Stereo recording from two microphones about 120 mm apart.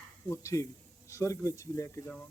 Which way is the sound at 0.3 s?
25° left (ahead or behind).